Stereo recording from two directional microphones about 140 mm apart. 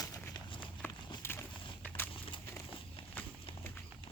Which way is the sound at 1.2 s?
15° left (ahead or behind).